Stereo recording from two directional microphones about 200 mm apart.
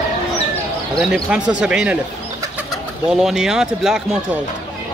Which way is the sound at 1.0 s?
5° right (ahead or behind).